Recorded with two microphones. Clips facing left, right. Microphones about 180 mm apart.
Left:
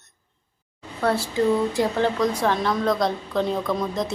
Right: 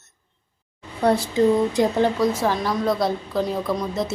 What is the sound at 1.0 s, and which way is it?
Speech, 15° right (ahead or behind).